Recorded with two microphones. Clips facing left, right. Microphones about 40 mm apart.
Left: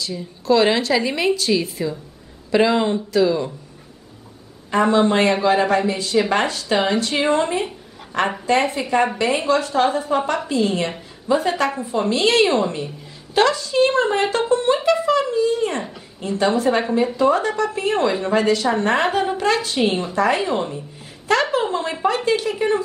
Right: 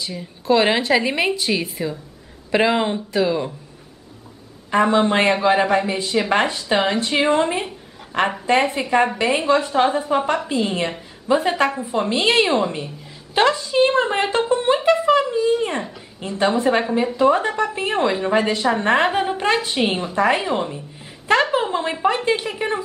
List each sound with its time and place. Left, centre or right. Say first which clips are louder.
0.0 s a woman's voice: left 2 dB; right
4.6 s a man's voice: even; centre
10.6 s a woman's voice: left 1 dB; right